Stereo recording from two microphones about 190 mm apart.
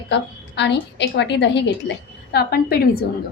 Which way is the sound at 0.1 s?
65° left (ahead or behind).